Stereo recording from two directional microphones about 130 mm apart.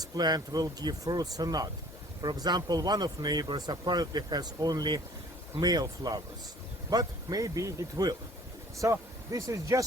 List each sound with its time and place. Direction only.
0.0 s speech: 30° right (ahead or behind)